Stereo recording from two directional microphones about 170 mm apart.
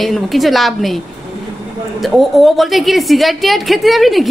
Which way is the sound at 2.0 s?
Centre (ahead or behind).